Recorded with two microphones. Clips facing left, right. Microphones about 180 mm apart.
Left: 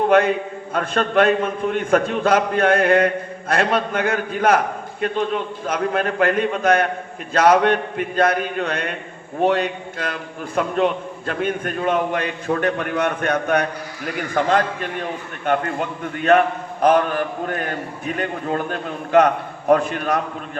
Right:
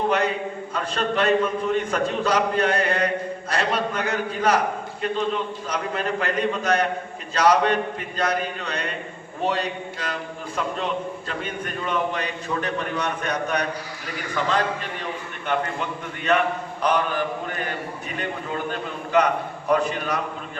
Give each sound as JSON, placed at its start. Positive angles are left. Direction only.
{"t": 0.7, "sound": "a man's voice", "side_deg": 55}